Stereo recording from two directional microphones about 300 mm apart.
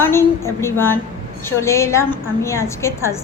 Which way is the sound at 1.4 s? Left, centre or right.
Centre.